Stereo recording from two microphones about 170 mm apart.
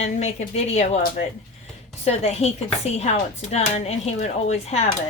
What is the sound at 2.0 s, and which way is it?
Speech, 40° left (ahead or behind).